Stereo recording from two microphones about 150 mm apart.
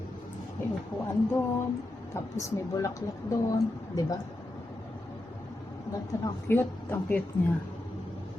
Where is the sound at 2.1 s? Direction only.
15° left (ahead or behind).